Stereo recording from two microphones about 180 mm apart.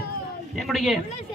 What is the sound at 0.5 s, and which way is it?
Speech, centre (ahead or behind).